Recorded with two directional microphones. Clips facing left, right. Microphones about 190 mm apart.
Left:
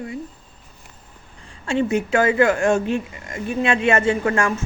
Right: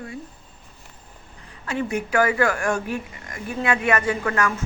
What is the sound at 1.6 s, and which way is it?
Speech, 25° left (ahead or behind).